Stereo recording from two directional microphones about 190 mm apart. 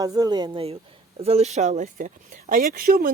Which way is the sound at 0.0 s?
20° right (ahead or behind).